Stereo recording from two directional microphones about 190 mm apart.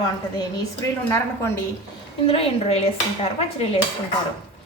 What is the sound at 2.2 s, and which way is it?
Dishes, 30° left (ahead or behind).